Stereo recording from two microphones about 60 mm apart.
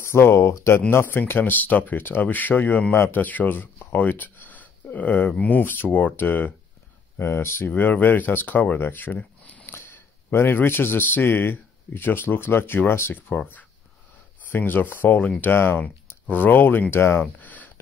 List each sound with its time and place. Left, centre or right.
0.0 s speech: left
7.2 s speech: left
9.7 s a man's voice: left
14.5 s speech: left
15.5 s speech: left
17.2 s a sound: left